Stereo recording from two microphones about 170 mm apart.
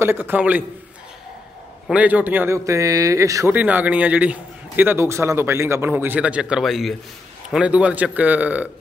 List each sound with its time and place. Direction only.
0.0 s a man's voice: 10° right (ahead or behind)
1.9 s a man's voice: 10° right (ahead or behind)